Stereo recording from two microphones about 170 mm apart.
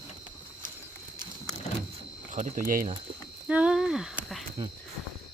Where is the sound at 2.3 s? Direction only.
50° right (ahead or behind).